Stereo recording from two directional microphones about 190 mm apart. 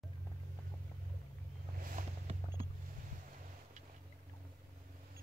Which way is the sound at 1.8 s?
45° right (ahead or behind).